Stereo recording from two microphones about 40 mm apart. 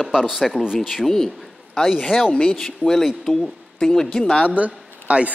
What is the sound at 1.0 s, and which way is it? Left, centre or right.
Speech, centre.